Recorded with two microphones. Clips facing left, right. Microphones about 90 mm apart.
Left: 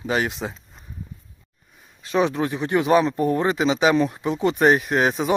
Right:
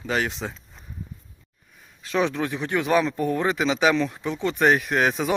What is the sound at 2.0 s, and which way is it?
Speech, 5° left (ahead or behind).